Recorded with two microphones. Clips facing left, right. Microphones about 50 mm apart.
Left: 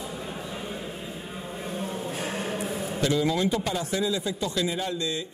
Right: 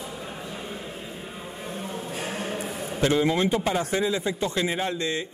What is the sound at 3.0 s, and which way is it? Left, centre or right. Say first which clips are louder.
Speech: right 3 dB; right.